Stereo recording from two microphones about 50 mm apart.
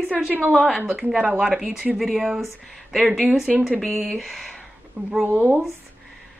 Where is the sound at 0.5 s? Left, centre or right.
Centre.